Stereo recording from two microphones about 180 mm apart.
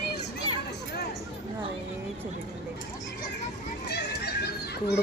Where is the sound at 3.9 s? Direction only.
70° left (ahead or behind).